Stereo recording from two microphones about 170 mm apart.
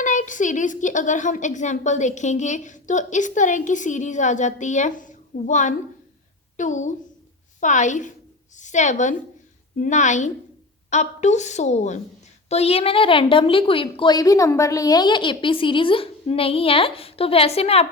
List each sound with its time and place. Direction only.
0.0 s a woman's voice: 50° left (ahead or behind)